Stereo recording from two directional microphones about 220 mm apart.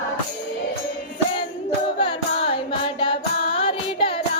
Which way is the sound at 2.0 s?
25° left (ahead or behind).